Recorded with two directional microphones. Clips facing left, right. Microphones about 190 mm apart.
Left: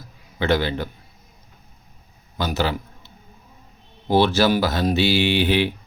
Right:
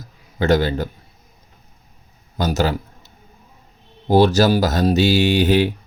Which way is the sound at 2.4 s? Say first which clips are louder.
Right 4 dB; 45° right (ahead or behind).